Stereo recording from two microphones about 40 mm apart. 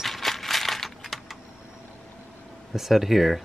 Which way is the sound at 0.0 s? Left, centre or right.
Centre.